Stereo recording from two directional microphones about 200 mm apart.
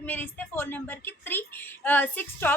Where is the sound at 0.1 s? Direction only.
10° left (ahead or behind).